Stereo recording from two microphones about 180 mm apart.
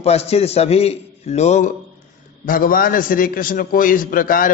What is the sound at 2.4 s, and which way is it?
A man's voice, 50° left (ahead or behind).